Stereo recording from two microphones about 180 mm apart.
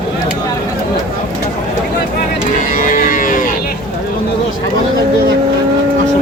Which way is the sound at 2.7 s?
45° left (ahead or behind).